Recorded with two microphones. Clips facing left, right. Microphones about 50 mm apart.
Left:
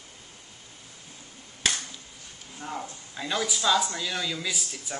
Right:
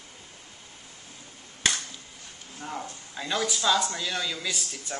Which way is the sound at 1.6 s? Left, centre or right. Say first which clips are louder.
Right 1 dB; centre.